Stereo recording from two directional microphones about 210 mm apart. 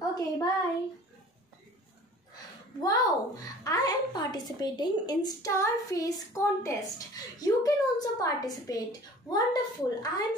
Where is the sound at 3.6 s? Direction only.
15° left (ahead or behind).